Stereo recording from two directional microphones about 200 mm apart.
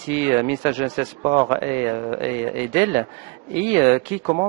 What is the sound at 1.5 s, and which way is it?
Speech, 15° right (ahead or behind).